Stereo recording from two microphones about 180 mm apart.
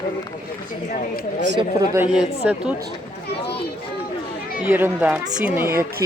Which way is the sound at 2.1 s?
5° right (ahead or behind).